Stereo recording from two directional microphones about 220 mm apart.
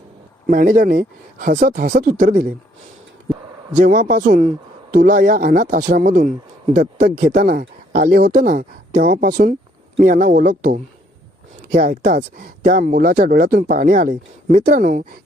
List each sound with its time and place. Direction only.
0.4 s speech: 40° right (ahead or behind)
3.8 s speech: 40° right (ahead or behind)